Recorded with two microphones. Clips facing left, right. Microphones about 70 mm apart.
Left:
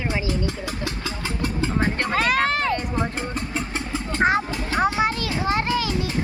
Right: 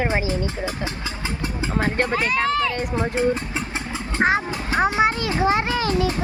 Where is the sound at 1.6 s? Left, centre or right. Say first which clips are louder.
Even; centre.